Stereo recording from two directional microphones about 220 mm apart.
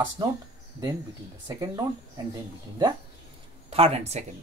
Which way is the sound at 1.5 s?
15° right (ahead or behind).